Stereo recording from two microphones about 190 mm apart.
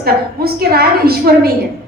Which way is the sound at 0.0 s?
55° right (ahead or behind).